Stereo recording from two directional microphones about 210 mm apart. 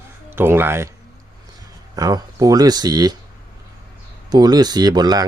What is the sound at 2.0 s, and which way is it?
Speech, 15° right (ahead or behind).